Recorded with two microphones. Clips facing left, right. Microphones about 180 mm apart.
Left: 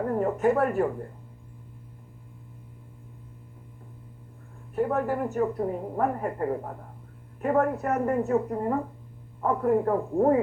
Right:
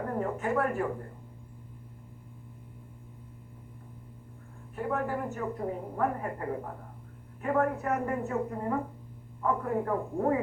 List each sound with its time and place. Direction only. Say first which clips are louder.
0.2 s a woman's voice: left 6 dB; 40° left (ahead or behind)
4.7 s a woman's voice: left 6 dB; 40° left (ahead or behind)